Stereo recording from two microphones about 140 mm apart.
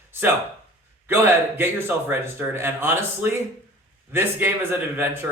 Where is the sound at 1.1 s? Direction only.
15° right (ahead or behind).